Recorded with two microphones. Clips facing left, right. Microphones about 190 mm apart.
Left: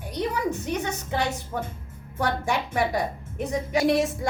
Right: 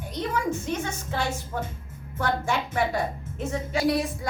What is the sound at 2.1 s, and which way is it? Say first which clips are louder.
A woman's voice: left 1 dB; 15° left (ahead or behind).